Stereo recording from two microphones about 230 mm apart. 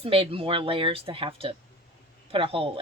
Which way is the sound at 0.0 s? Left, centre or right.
Right.